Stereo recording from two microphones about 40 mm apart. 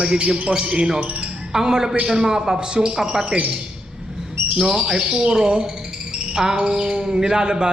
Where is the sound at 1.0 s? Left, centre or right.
Right.